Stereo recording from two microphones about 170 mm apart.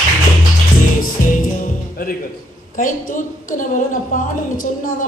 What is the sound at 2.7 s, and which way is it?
Speech, 50° left (ahead or behind).